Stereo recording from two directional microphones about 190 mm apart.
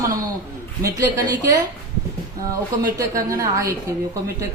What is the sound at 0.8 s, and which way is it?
Speech, 20° right (ahead or behind).